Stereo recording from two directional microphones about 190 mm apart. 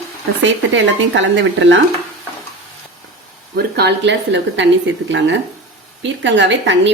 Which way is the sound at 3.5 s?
60° right (ahead or behind).